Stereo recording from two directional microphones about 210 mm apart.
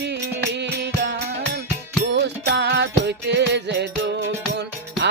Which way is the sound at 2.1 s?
55° right (ahead or behind).